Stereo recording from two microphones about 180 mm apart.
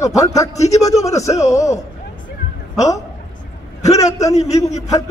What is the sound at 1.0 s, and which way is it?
Speech, 15° left (ahead or behind).